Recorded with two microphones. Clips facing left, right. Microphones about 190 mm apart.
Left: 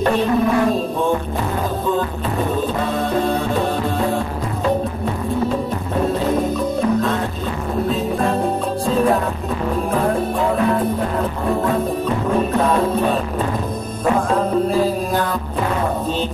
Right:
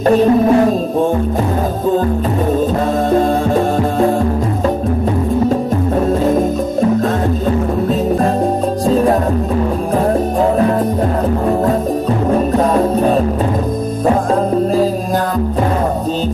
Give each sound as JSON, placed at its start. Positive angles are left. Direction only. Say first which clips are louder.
{"t": 0.0, "sound": "music", "louder": "right 7 dB", "side_deg": -40}
{"t": 12.7, "sound": "music", "louder": "right 5 dB", "side_deg": -40}